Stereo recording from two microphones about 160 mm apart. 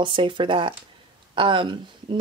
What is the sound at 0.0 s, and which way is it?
A woman's voice, 30° right (ahead or behind).